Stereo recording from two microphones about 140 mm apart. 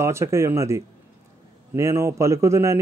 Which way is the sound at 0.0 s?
20° right (ahead or behind).